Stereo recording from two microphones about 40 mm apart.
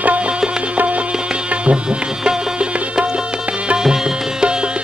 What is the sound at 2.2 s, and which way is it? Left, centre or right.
Music, right.